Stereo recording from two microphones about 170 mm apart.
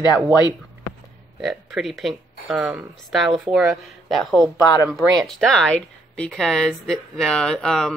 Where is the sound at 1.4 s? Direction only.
Centre (ahead or behind).